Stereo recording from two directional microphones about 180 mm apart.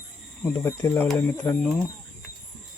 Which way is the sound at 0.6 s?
15° left (ahead or behind).